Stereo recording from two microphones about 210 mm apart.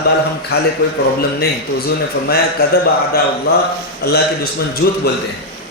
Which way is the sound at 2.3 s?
45° left (ahead or behind).